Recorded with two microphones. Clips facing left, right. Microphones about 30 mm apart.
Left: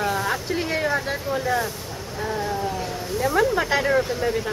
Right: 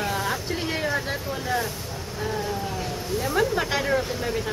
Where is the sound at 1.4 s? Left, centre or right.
Centre.